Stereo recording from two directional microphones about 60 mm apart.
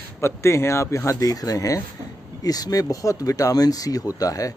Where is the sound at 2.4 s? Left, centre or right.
Left.